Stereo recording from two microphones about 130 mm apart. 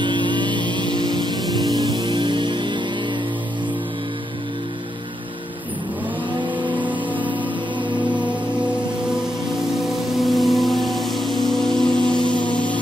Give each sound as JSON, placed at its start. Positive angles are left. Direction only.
{"t": 0.0, "sound": "vehicle", "side_deg": -35}
{"t": 6.8, "sound": "music", "side_deg": -40}
{"t": 9.8, "sound": "music", "side_deg": 0}